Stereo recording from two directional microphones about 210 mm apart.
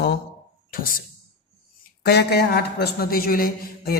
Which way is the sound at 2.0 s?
50° left (ahead or behind).